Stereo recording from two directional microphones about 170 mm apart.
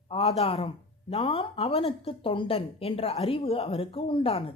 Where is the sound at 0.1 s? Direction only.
35° left (ahead or behind).